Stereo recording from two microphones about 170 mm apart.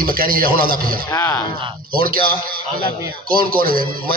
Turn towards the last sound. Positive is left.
turn(degrees=-60)  # may be behind; listen again after turning